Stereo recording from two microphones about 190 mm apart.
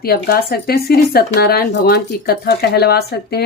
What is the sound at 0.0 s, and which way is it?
Speech, 55° left (ahead or behind).